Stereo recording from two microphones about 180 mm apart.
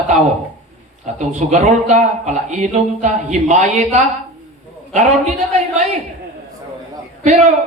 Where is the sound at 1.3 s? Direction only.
40° right (ahead or behind).